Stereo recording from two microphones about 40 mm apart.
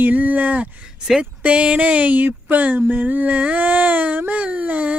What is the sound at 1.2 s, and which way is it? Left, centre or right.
Speech, right.